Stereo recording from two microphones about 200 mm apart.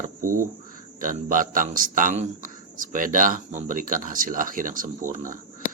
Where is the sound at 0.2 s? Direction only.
40° right (ahead or behind).